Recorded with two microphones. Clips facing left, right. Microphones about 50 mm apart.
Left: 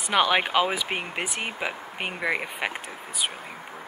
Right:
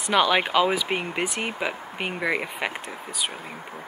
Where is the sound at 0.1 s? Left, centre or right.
Centre.